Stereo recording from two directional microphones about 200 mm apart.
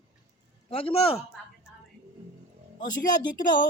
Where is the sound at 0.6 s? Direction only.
30° left (ahead or behind).